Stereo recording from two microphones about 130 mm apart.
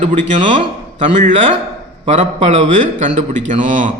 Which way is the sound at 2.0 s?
65° right (ahead or behind).